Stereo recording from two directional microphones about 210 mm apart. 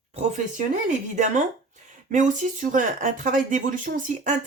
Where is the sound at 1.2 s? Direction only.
35° right (ahead or behind).